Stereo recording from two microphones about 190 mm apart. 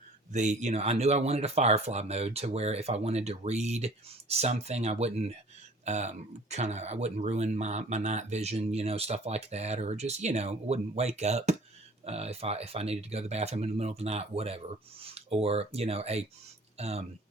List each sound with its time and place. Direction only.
0.3 s speech: 40° right (ahead or behind)